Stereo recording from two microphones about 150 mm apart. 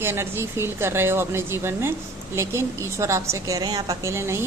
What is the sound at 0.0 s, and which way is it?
A woman's voice, 15° right (ahead or behind).